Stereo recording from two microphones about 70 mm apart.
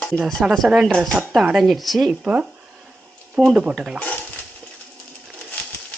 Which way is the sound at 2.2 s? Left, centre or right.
Centre.